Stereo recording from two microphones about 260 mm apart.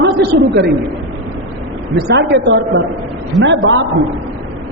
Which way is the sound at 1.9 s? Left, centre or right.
Right.